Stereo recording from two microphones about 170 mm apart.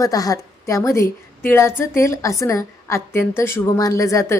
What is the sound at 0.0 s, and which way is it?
A woman's voice, 20° left (ahead or behind).